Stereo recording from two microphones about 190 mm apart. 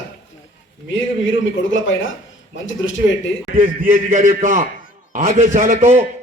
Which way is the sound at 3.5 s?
45° right (ahead or behind).